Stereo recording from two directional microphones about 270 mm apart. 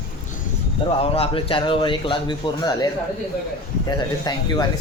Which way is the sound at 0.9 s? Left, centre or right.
Left.